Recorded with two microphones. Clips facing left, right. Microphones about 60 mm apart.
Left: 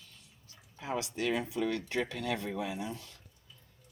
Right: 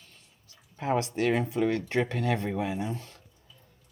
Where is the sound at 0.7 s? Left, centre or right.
Right.